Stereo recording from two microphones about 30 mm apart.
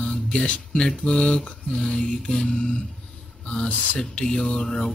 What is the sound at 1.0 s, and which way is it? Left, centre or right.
Mantra, left.